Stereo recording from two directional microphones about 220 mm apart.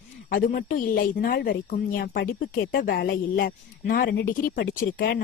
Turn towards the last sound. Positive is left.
turn(degrees=40)  # may be behind; listen again after turning